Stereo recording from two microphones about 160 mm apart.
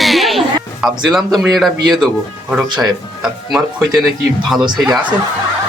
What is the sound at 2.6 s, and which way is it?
Speech, 30° right (ahead or behind).